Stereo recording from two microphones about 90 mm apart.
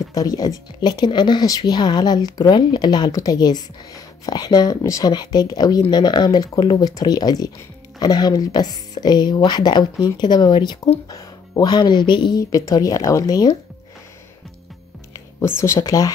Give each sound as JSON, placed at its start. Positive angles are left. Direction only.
{"t": 0.1, "sound": "speech", "side_deg": 45}
{"t": 4.8, "sound": "speech", "side_deg": 35}
{"t": 5.1, "sound": "speech", "side_deg": 50}
{"t": 12.4, "sound": "speech", "side_deg": 40}
{"t": 15.4, "sound": "speech", "side_deg": 30}
{"t": 15.8, "sound": "speech", "side_deg": 40}